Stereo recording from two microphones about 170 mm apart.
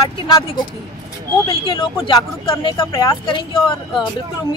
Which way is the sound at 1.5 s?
30° left (ahead or behind).